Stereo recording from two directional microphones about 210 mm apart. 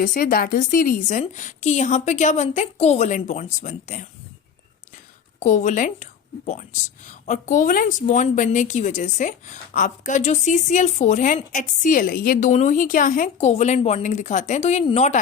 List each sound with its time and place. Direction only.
0.0 s a woman's voice: 40° left (ahead or behind)
5.4 s a woman's voice: 35° left (ahead or behind)